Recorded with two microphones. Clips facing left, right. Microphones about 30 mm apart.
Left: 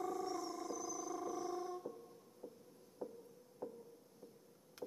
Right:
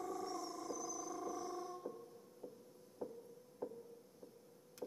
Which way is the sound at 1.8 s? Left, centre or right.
Centre.